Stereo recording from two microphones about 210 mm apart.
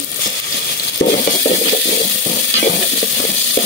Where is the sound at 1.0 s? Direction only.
40° left (ahead or behind).